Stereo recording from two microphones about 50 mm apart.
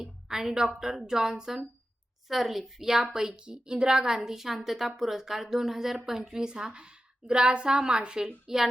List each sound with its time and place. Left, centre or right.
0.0 s a woman's voice: centre